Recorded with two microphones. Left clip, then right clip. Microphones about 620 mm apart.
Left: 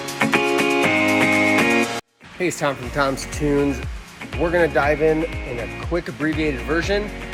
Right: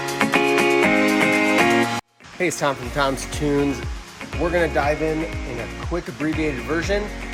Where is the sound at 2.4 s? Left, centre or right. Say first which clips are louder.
Even; centre.